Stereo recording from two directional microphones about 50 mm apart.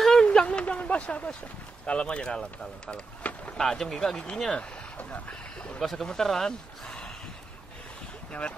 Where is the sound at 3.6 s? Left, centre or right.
Centre.